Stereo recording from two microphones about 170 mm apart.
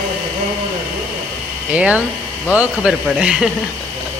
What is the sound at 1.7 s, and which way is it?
Speech, 5° right (ahead or behind).